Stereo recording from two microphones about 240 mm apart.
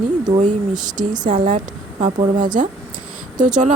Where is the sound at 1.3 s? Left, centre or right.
Right.